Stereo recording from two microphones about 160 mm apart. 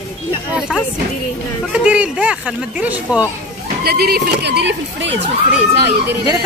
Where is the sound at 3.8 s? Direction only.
80° right.